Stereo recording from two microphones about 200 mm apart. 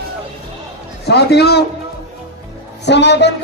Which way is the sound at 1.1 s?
55° left (ahead or behind).